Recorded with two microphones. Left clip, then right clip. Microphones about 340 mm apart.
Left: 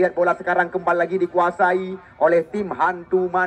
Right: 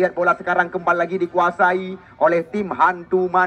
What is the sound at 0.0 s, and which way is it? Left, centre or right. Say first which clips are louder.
A man's voice: right 1 dB; centre.